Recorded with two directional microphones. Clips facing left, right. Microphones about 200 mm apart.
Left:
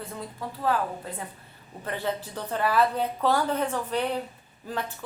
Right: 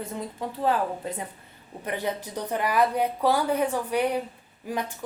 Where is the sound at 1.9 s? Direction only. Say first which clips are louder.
Right 1 dB; 15° right (ahead or behind).